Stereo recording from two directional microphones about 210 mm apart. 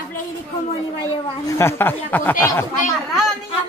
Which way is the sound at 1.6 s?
10° left (ahead or behind).